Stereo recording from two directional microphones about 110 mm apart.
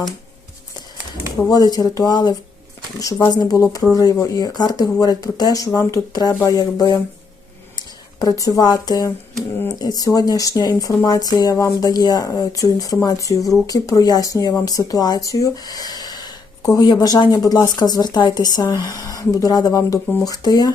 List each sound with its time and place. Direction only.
1.4 s speech: 5° left (ahead or behind)
1.7 s speech: 35° left (ahead or behind)